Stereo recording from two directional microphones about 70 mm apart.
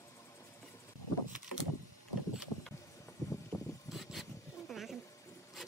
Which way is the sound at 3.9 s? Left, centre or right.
Centre.